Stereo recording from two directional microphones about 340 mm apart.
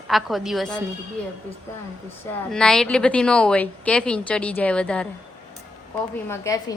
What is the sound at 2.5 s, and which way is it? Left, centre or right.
A woman's voice, centre.